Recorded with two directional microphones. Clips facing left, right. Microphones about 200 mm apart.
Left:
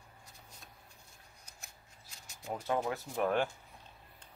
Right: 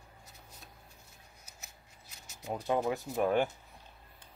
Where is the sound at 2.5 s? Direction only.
15° right (ahead or behind).